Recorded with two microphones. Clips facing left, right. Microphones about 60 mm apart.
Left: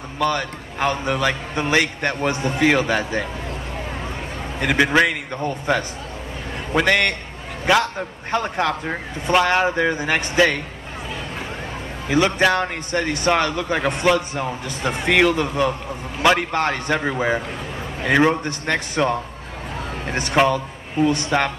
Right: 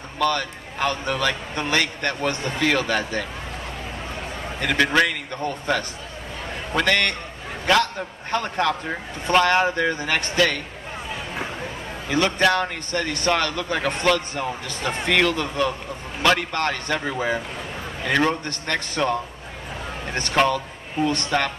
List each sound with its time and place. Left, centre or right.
0.2 s speech: centre
4.6 s speech: centre
12.1 s a man's voice: centre